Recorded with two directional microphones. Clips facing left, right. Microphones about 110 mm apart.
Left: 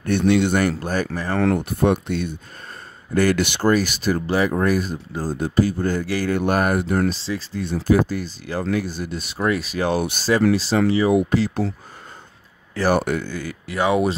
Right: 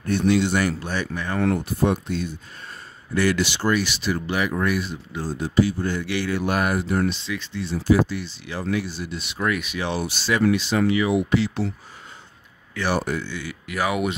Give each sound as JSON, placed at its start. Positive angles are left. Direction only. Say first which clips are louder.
{"t": 0.0, "sound": "speech", "louder": "left 2 dB", "side_deg": 60}
{"t": 1.5, "sound": "speech", "louder": "left 3 dB", "side_deg": 55}
{"t": 3.2, "sound": "speech", "louder": "left 3 dB", "side_deg": 50}
{"t": 7.2, "sound": "speech", "louder": "left 3 dB", "side_deg": 35}
{"t": 7.6, "sound": "speech", "louder": "left 1 dB", "side_deg": 50}
{"t": 9.4, "sound": "speech", "louder": "left 4 dB", "side_deg": 30}
{"t": 12.7, "sound": "speech", "louder": "left 5 dB", "side_deg": 40}
{"t": 13.0, "sound": "speech", "louder": "left 3 dB", "side_deg": 50}
{"t": 13.7, "sound": "speech", "louder": "left 5 dB", "side_deg": 30}